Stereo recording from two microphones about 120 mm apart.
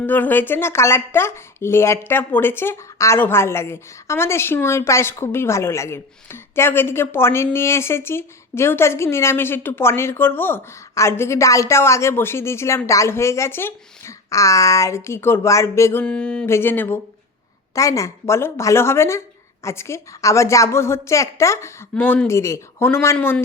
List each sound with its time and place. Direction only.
0.0 s speech: 15° left (ahead or behind)
16.0 s music: 10° left (ahead or behind)
16.5 s speech: 20° left (ahead or behind)